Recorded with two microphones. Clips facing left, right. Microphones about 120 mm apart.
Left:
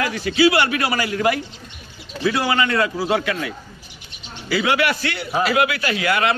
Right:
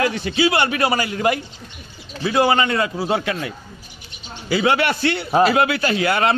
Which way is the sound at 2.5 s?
25° right (ahead or behind).